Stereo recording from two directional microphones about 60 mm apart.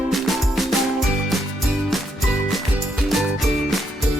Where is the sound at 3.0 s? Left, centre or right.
Centre.